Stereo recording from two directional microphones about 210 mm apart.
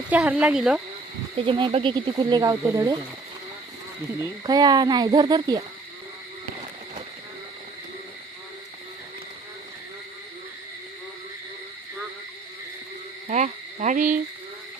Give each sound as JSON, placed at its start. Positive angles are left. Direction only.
{"t": 0.1, "sound": "speech", "side_deg": -5}
{"t": 1.5, "sound": "speech", "side_deg": -25}
{"t": 4.2, "sound": "speech", "side_deg": -20}
{"t": 13.2, "sound": "insect", "side_deg": -35}